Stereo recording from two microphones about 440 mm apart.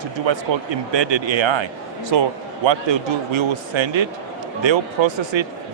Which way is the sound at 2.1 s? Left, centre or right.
Right.